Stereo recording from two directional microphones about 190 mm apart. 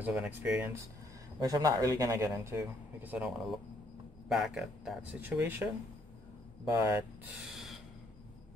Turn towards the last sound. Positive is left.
turn(degrees=0)  # may be behind; listen again after turning